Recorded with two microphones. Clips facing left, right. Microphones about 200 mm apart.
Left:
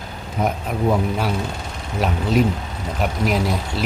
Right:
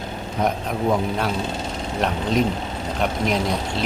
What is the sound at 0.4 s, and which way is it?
Speech, 5° left (ahead or behind).